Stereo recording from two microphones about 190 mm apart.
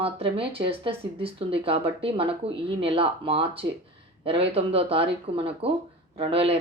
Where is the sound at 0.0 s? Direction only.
30° right (ahead or behind).